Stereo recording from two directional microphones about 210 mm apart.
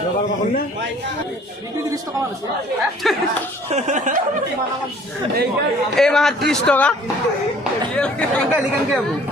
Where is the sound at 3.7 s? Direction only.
35° right (ahead or behind).